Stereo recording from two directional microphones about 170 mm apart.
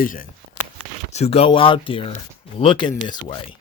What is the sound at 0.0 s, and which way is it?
Speech, 55° left (ahead or behind).